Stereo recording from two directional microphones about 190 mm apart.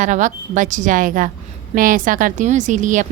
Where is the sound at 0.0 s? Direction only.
40° right (ahead or behind).